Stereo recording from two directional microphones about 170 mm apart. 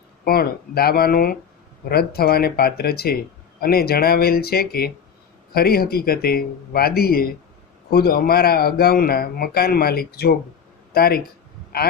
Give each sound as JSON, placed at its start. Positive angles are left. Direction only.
{"t": 0.3, "sound": "speech", "side_deg": 65}